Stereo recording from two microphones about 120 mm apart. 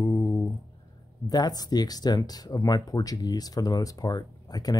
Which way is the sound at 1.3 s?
35° left (ahead or behind).